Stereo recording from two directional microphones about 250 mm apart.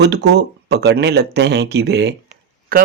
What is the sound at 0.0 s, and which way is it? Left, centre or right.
Speech, right.